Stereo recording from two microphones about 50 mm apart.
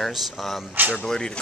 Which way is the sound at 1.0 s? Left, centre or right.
Centre.